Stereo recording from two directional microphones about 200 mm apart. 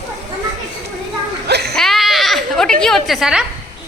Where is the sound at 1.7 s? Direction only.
Centre (ahead or behind).